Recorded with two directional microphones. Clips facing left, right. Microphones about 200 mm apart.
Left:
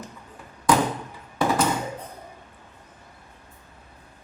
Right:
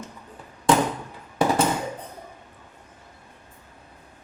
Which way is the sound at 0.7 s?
25° right (ahead or behind).